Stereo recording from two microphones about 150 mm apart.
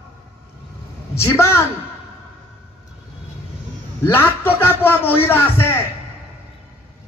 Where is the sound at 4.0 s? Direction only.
15° left (ahead or behind).